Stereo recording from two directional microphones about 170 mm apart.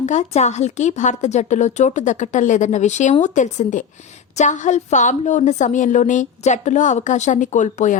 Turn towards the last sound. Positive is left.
turn(degrees=45)  # may be behind; listen again after turning